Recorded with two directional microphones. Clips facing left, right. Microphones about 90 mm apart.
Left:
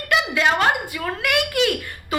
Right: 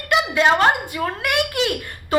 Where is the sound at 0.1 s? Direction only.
30° right (ahead or behind).